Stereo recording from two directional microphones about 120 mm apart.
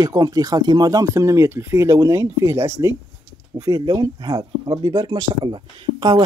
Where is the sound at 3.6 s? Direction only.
35° right (ahead or behind).